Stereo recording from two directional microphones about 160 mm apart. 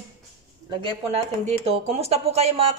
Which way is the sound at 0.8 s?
30° right (ahead or behind).